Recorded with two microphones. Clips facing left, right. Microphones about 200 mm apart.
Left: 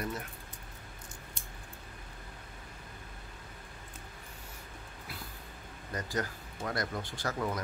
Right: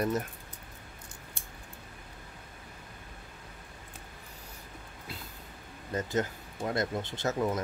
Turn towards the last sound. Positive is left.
turn(degrees=-25)  # may be behind; listen again after turning